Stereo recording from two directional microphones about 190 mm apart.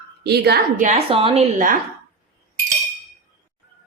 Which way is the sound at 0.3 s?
60° right (ahead or behind).